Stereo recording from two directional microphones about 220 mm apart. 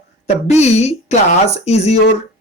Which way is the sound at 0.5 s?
30° left (ahead or behind).